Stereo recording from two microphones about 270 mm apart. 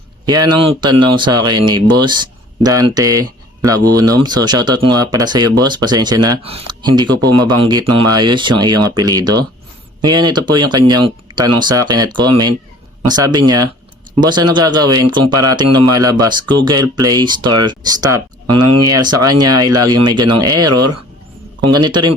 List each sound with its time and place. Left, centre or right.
0.3 s speech: centre
15.6 s speech: right
15.9 s speech: centre
18.4 s speech: right
19.5 s speech: centre